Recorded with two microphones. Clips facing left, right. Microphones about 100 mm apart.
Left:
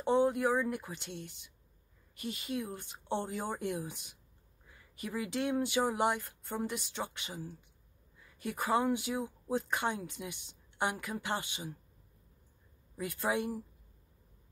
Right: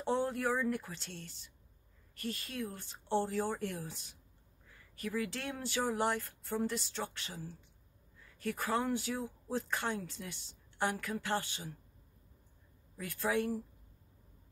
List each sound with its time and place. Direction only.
0.0 s speech: 10° left (ahead or behind)
6.2 s speech: 5° left (ahead or behind)
12.9 s speech: 20° left (ahead or behind)